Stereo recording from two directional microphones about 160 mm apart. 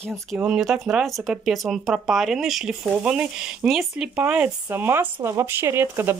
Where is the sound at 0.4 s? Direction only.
5° right (ahead or behind).